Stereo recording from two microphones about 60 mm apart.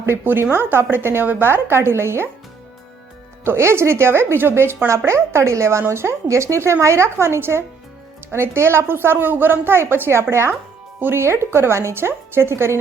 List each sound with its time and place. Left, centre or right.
0.0 s a woman's voice: right
3.4 s a woman's voice: right
4.9 s a woman's voice: right